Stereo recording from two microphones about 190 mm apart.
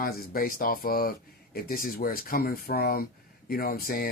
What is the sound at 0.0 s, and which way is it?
Speech, 50° left (ahead or behind).